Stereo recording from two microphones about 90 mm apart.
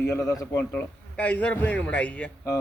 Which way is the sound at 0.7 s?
15° left (ahead or behind).